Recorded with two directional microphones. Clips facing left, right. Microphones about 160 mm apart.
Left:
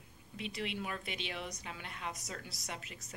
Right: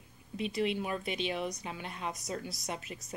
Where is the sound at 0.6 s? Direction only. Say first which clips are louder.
Right 8 dB; 25° right (ahead or behind).